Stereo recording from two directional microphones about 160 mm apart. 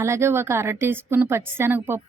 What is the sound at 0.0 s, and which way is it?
A woman's voice, 15° right (ahead or behind).